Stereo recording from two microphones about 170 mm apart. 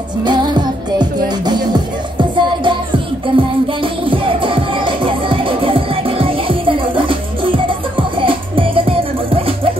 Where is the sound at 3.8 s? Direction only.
30° right (ahead or behind).